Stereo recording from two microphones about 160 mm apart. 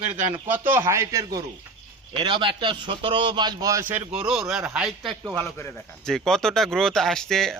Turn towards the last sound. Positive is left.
turn(degrees=5)  # may be behind; listen again after turning